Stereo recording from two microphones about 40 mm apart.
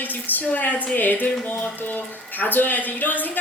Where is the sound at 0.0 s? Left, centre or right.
Left.